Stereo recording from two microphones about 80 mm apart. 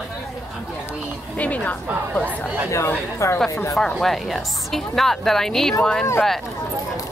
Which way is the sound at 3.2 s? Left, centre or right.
Left.